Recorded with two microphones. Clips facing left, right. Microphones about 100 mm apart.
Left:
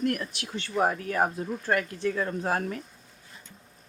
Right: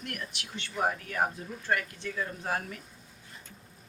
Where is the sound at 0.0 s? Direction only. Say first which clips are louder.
Left 11 dB; 35° left (ahead or behind).